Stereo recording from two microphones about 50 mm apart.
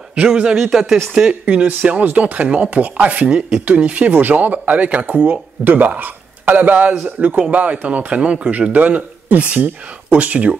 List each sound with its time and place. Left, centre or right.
0.1 s a man's voice: centre
1.4 s speech: right